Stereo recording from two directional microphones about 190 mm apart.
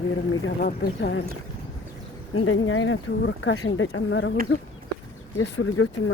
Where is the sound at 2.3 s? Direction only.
90° left.